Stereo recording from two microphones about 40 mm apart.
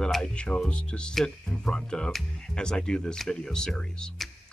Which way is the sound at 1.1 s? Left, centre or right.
Centre.